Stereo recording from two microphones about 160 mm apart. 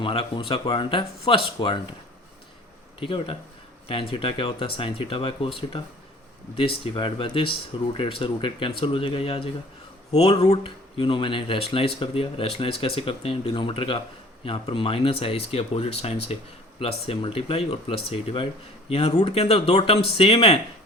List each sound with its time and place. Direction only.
0.0 s speech: 30° left (ahead or behind)
3.0 s speech: 35° left (ahead or behind)
6.8 s speech: 30° left (ahead or behind)